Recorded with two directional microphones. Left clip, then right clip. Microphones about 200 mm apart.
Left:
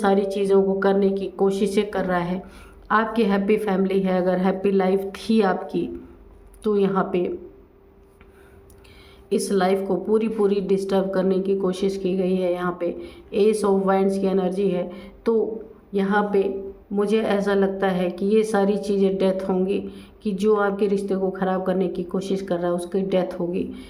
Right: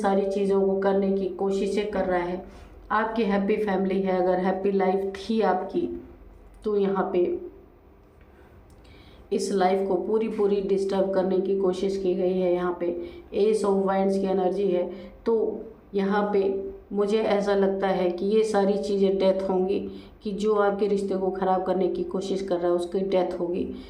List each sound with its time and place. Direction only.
0.0 s a woman's voice: 45° left (ahead or behind)
9.3 s a woman's voice: 30° left (ahead or behind)